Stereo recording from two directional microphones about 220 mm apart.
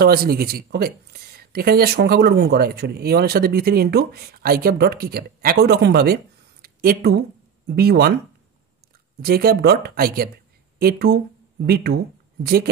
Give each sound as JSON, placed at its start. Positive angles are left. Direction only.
{"t": 0.0, "sound": "speech", "side_deg": -45}
{"t": 6.6, "sound": "a sound", "side_deg": -45}
{"t": 7.6, "sound": "speech", "side_deg": -45}
{"t": 9.2, "sound": "speech", "side_deg": -45}